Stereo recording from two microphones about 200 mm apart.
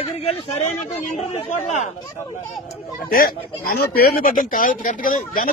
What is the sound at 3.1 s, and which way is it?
A man's voice, 45° left (ahead or behind).